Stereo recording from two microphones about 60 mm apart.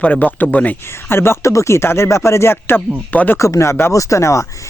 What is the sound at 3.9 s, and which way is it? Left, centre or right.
Speech, left.